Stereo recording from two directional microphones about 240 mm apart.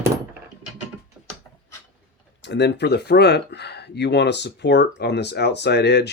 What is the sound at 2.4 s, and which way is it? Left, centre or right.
Speech, left.